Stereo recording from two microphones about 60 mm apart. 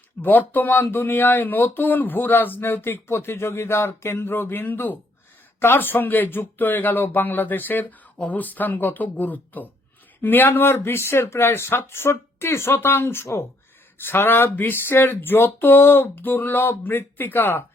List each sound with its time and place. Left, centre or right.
0.2 s speech: left
10.5 s speech: left